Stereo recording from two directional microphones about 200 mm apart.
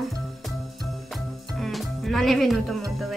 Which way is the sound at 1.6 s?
Centre (ahead or behind).